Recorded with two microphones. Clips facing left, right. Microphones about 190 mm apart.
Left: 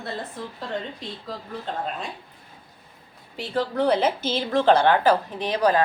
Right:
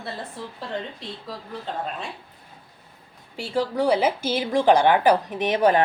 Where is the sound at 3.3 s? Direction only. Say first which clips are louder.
Right 1 dB; 10° right (ahead or behind).